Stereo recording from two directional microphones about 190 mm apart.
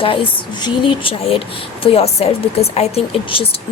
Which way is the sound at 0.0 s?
30° left (ahead or behind).